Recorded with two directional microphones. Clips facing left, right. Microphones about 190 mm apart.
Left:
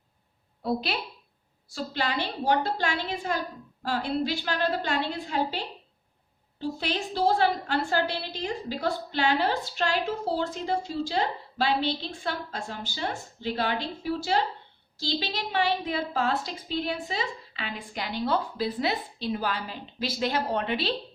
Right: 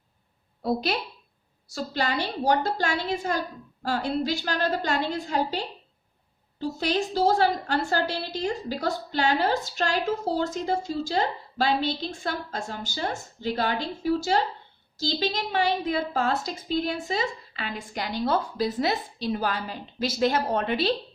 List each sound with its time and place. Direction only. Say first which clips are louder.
0.6 s a woman's voice: right 3 dB; 45° right (ahead or behind)